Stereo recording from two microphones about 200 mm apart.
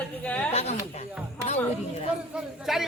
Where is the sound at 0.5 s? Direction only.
30° left (ahead or behind).